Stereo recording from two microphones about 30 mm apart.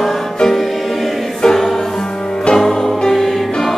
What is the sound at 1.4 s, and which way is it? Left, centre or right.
Choir, centre.